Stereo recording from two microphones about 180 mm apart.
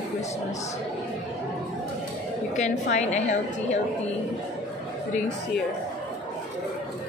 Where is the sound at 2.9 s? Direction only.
40° left (ahead or behind).